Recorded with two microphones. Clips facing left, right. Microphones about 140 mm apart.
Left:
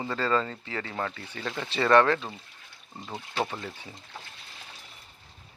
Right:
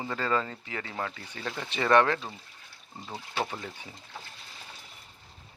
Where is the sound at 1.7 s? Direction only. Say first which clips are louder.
Left 2 dB; 15° right (ahead or behind).